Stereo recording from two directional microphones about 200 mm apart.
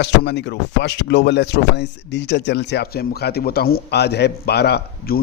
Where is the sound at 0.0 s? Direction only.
60° left (ahead or behind).